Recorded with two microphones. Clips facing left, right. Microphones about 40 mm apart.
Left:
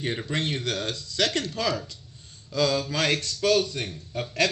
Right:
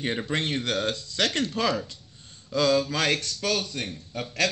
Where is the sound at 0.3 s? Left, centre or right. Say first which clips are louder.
Right 1 dB; right.